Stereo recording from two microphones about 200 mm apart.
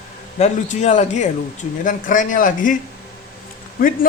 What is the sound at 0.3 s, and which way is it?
Speech, 35° left (ahead or behind).